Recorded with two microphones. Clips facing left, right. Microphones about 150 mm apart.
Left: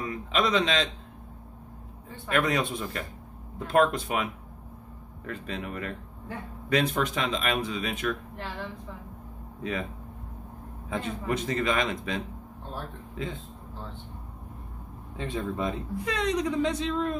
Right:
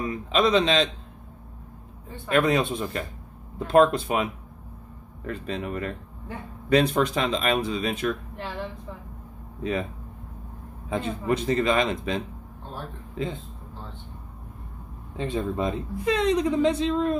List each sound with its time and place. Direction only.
0.1 s speech: 25° right (ahead or behind)
2.2 s speech: 30° right (ahead or behind)
9.6 s speech: 30° right (ahead or behind)
10.9 s speech: 30° right (ahead or behind)
15.1 s speech: 25° right (ahead or behind)